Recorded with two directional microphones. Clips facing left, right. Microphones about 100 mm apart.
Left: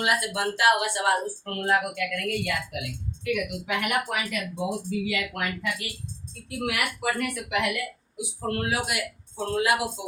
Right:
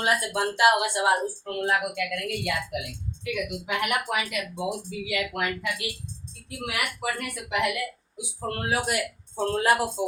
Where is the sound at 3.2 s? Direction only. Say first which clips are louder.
Left 2 dB; 20° right (ahead or behind).